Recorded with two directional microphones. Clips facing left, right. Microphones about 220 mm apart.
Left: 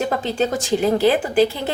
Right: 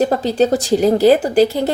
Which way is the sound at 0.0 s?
35° right (ahead or behind).